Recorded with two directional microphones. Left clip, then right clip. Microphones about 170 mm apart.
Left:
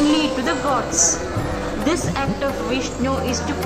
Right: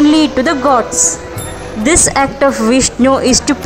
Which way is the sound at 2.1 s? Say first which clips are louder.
Right 11 dB; 40° right (ahead or behind).